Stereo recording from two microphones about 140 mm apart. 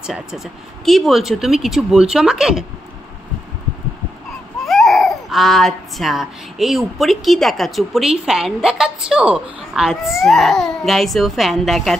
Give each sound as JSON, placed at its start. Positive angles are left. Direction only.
{"t": 0.0, "sound": "speech", "side_deg": -5}
{"t": 4.6, "sound": "speech", "side_deg": 0}